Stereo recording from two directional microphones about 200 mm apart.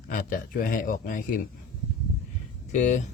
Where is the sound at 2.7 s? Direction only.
40° left (ahead or behind).